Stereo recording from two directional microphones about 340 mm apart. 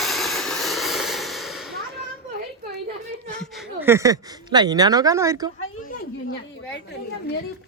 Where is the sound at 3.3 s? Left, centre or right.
Centre.